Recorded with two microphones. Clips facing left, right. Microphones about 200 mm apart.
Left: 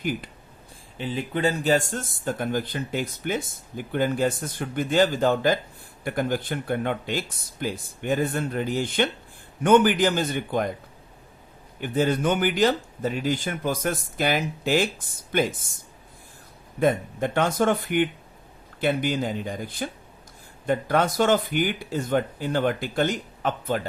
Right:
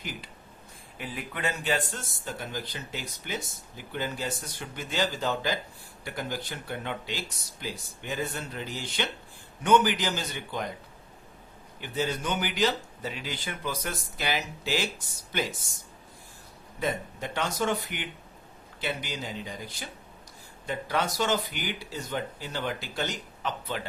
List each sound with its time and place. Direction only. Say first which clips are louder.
0.0 s speech: left 11 dB; 55° left (ahead or behind)
0.9 s speech: left 9 dB; 25° left (ahead or behind); by 10.7 s 50° left (ahead or behind)
11.8 s speech: left 8 dB; 55° left (ahead or behind)
16.8 s speech: left 9 dB; 55° left (ahead or behind)